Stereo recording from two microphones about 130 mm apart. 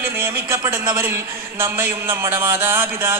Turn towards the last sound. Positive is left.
turn(degrees=-20)  # may be behind; listen again after turning